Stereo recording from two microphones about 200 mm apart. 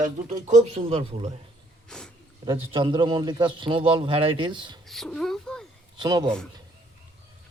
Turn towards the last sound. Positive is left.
turn(degrees=-20)  # may be behind; listen again after turning